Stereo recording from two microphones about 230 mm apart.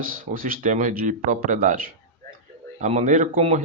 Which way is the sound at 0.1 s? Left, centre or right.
Right.